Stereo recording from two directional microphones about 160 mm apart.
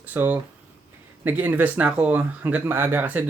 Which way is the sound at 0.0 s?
10° right (ahead or behind).